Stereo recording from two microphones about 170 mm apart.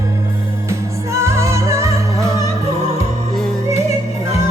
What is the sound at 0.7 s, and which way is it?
Music, 15° right (ahead or behind).